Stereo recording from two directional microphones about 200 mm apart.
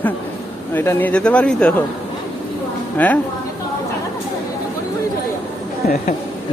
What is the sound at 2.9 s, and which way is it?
Speech, 10° left (ahead or behind).